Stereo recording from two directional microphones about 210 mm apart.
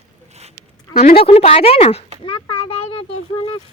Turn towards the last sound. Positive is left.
turn(degrees=25)  # may be behind; listen again after turning